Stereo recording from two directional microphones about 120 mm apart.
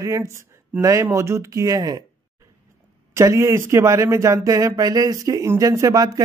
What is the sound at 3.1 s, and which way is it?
Speech, 25° right (ahead or behind).